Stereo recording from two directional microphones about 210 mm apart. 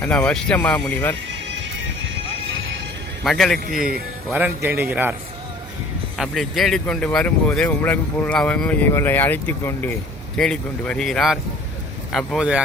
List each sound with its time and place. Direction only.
0.0 s speech: 5° left (ahead or behind)
1.5 s music: 65° right (ahead or behind)
3.2 s a man's voice: centre (ahead or behind)
6.1 s speech: centre (ahead or behind)